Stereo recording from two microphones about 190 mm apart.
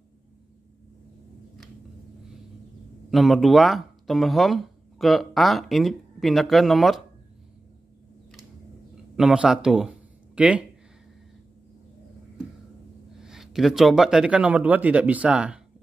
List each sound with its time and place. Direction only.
3.1 s speech: centre (ahead or behind)
8.9 s a sound: centre (ahead or behind)
13.2 s speech: 5° right (ahead or behind)